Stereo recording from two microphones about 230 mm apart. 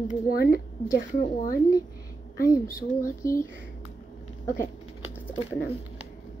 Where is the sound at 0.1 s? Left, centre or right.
Left.